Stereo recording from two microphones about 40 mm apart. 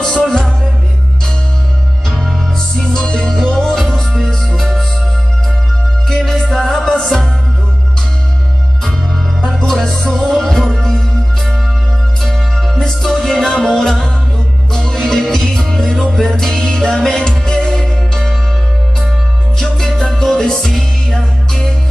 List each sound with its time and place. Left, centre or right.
0.3 s music: centre
2.9 s music: left
6.0 s music: centre
9.6 s music: centre
12.2 s music: centre
12.7 s music: centre
19.5 s music: centre